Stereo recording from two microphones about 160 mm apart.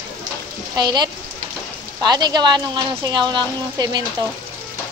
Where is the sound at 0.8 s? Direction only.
25° right (ahead or behind).